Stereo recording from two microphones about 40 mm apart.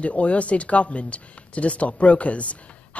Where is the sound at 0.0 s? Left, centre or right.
Left.